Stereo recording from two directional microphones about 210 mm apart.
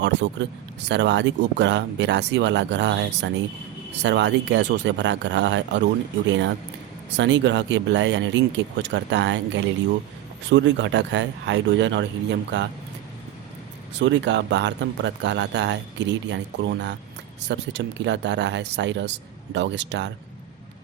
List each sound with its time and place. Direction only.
0.0 s speech: 60° right (ahead or behind)
14.0 s speech: 60° right (ahead or behind)